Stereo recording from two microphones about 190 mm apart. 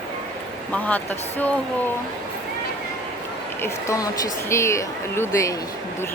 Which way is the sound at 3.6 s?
15° left (ahead or behind).